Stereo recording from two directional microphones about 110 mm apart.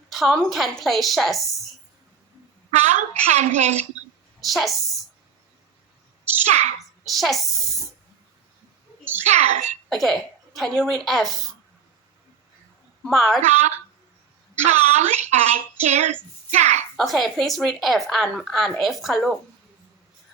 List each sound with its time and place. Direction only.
0.1 s speech: centre (ahead or behind)
2.7 s a woman's voice: 90° right
4.4 s a woman's voice: centre (ahead or behind)
6.3 s a sound: 20° right (ahead or behind)
6.7 s a woman's voice: centre (ahead or behind)
9.2 s a woman's voice: 90° right
9.9 s speech: centre (ahead or behind)
13.1 s speech: centre (ahead or behind)
13.4 s a woman's voice: 90° right
17.0 s speech: centre (ahead or behind)